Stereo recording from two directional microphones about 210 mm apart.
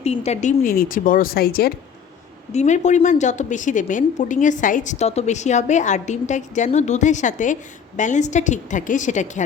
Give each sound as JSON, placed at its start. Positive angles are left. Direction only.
{"t": 0.0, "sound": "a woman's voice", "side_deg": 30}
{"t": 2.5, "sound": "a woman's voice", "side_deg": 35}